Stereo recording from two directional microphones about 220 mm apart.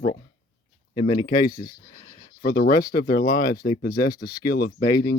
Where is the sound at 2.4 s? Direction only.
45° left (ahead or behind).